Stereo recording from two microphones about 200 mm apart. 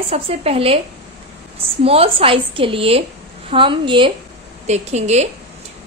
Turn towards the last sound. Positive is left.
turn(degrees=-35)  # may be behind; listen again after turning